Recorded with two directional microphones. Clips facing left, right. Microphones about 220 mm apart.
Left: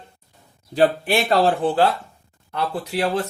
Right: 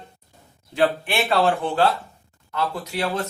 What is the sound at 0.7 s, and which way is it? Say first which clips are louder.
Speech: left 3 dB; 40° left (ahead or behind).